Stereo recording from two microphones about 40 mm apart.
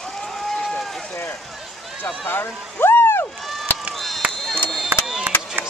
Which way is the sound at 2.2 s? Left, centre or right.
Left.